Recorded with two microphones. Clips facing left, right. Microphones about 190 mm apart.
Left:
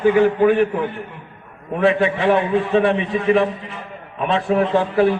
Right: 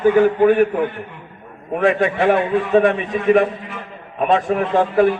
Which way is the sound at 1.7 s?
45° right (ahead or behind).